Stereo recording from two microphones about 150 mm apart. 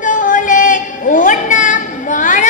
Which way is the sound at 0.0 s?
60° left (ahead or behind).